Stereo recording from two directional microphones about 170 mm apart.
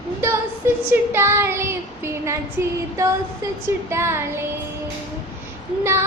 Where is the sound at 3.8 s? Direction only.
15° right (ahead or behind).